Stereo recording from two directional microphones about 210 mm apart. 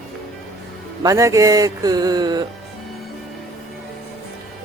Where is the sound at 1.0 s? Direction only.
15° right (ahead or behind).